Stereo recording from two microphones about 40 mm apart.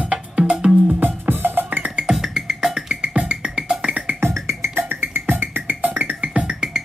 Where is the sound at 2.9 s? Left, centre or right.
Right.